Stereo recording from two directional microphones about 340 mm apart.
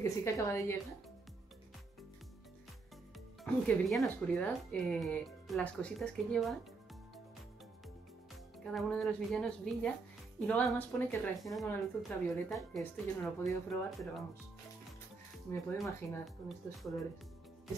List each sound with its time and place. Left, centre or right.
0.0 s a woman's voice: centre
3.6 s a woman's voice: centre
8.7 s a woman's voice: centre
15.5 s a woman's voice: centre